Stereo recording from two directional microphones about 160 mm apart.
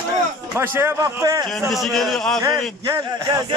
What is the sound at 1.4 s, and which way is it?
Speech, centre (ahead or behind).